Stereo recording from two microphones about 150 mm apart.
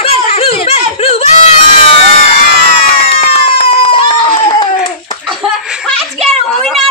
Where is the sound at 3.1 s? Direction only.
40° left (ahead or behind).